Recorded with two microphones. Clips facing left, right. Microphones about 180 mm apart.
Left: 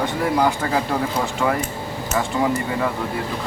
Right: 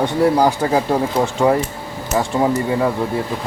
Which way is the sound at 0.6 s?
25° right (ahead or behind).